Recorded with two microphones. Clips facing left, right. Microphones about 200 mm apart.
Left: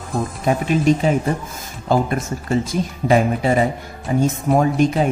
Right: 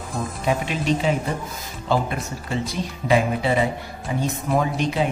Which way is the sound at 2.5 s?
45° left (ahead or behind).